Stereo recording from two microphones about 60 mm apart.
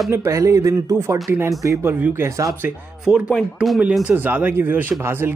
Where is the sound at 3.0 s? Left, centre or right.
Centre.